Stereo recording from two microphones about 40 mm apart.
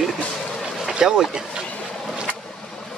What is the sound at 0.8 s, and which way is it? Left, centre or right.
Boat, centre.